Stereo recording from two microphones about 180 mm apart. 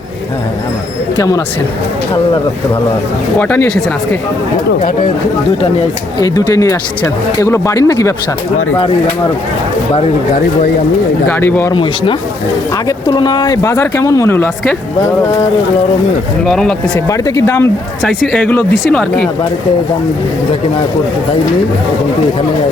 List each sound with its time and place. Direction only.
1.1 s speech: 20° left (ahead or behind)
3.3 s speech: 10° left (ahead or behind)
6.1 s speech: 20° left (ahead or behind)
11.3 s speech: 10° left (ahead or behind)
11.7 s speech: 30° left (ahead or behind); by 14.8 s 10° left (ahead or behind)
16.5 s speech: 5° left (ahead or behind)
17.1 s speech: 20° left (ahead or behind)